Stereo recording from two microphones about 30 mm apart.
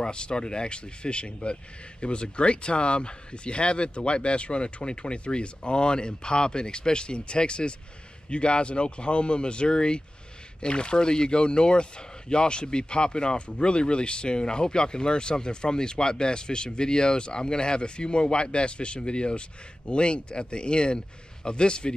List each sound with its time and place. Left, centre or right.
0.0 s speech: left